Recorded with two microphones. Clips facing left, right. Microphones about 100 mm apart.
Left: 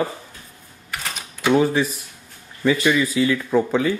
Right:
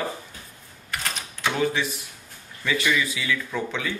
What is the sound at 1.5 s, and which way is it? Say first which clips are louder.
Speech: left 9 dB; 40° left (ahead or behind).